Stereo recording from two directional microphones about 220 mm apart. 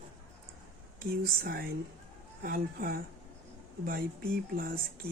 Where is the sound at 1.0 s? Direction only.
40° right (ahead or behind).